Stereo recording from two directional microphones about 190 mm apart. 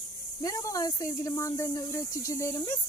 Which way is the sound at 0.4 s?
20° left (ahead or behind).